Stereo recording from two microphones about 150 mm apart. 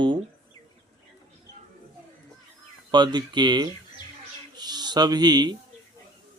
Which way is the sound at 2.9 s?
30° right (ahead or behind).